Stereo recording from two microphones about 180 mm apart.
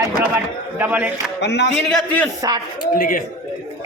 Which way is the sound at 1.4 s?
75° left (ahead or behind).